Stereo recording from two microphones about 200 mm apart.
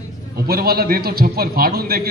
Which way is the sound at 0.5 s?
50° right (ahead or behind).